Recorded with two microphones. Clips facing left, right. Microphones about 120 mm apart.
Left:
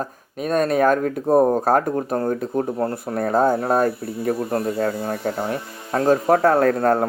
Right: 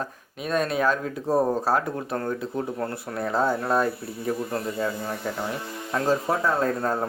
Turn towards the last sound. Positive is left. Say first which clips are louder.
# left 7 dB
turn(degrees=65)  # may be behind; listen again after turning